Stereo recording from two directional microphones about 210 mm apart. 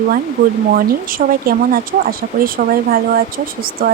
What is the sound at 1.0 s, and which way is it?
Speech, 45° right (ahead or behind).